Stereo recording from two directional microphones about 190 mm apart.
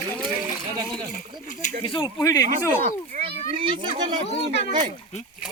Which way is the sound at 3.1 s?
40° right (ahead or behind).